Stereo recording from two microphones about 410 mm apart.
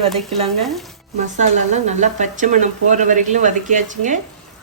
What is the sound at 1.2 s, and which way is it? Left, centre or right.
Speech, centre.